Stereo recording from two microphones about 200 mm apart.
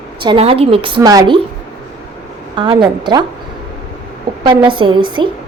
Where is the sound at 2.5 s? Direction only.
25° right (ahead or behind).